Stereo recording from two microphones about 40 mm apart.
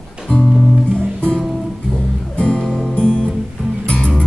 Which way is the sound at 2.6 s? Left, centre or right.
Centre.